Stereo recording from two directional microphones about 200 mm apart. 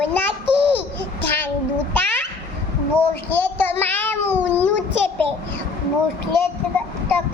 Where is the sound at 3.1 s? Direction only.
10° left (ahead or behind).